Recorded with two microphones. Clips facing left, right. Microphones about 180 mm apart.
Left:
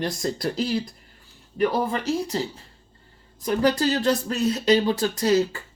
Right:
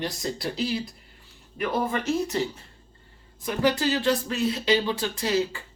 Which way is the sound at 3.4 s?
40° left (ahead or behind).